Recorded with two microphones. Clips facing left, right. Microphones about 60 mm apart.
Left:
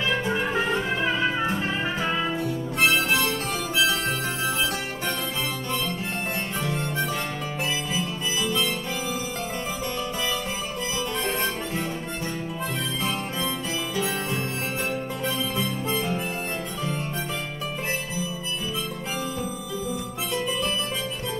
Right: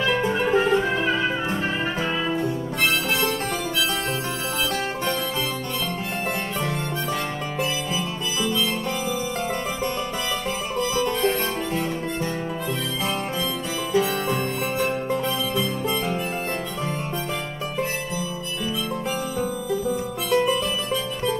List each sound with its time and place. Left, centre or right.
0.0 s music: right
0.5 s music: centre
10.8 s music: right
13.9 s music: right